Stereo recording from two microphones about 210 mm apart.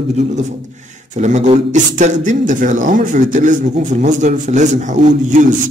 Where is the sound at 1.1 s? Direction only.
35° right (ahead or behind).